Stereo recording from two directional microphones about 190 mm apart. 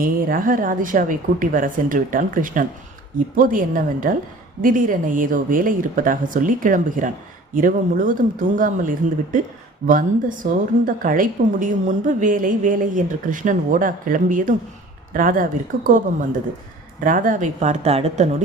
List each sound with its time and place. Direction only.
0.0 s a woman's voice: 45° right (ahead or behind)
17.0 s speech: 45° right (ahead or behind)